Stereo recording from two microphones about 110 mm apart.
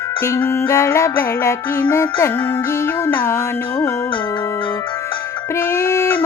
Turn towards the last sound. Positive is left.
turn(degrees=25)  # may be behind; listen again after turning